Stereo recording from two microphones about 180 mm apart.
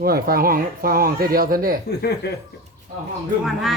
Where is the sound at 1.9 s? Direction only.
65° left (ahead or behind).